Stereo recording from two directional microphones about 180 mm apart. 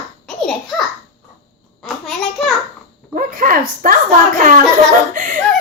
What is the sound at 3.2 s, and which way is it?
Speech, 55° right (ahead or behind).